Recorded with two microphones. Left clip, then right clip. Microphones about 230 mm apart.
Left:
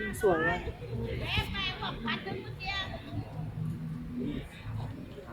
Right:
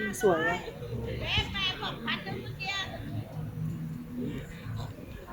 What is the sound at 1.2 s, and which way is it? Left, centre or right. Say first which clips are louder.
Music: right 4 dB; right.